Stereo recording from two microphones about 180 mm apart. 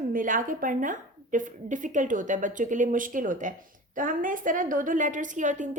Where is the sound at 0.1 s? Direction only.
50° right (ahead or behind).